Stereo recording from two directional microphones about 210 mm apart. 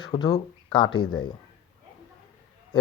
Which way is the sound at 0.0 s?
20° left (ahead or behind).